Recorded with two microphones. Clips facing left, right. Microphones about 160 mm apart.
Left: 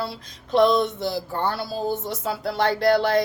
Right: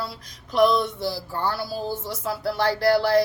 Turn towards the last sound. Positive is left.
turn(degrees=20)  # may be behind; listen again after turning